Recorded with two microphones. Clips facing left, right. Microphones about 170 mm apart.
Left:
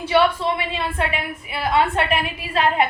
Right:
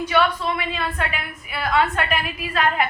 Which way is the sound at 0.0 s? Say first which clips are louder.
Left 3 dB; 30° left (ahead or behind).